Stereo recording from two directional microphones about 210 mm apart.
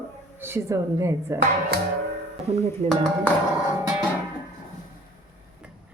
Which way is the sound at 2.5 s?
30° right (ahead or behind).